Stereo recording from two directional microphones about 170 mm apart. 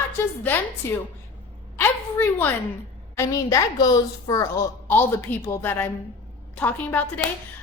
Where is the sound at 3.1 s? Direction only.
20° left (ahead or behind).